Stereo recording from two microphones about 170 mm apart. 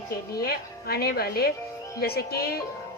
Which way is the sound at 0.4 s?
65° left (ahead or behind).